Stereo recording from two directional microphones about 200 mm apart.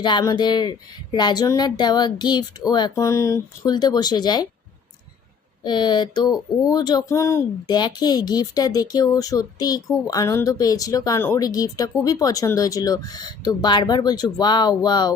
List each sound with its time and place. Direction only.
0.0 s speech: 20° left (ahead or behind)
5.6 s speech: 20° left (ahead or behind)